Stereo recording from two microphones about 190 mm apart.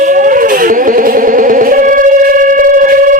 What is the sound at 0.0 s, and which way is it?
Music, 45° right (ahead or behind).